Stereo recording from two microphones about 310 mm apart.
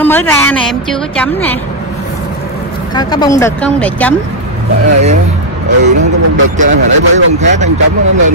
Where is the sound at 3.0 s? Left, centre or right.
Centre.